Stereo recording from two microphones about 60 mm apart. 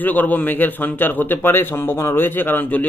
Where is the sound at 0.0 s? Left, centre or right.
Left.